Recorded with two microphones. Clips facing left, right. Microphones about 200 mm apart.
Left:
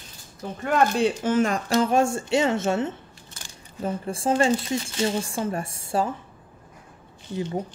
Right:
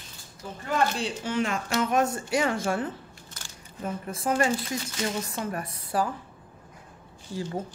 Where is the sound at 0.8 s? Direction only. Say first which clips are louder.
Left 7 dB; 50° left (ahead or behind); by 6.1 s 25° left (ahead or behind).